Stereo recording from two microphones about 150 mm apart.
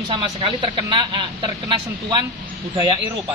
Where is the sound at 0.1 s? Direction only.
35° right (ahead or behind).